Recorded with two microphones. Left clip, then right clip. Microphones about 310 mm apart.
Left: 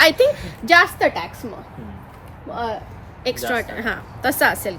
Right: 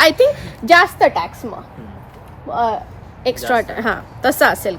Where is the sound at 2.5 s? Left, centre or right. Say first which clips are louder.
Right 8 dB; centre.